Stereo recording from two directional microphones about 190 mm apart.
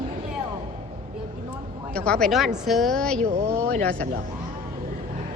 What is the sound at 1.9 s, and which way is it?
Speech, 5° left (ahead or behind).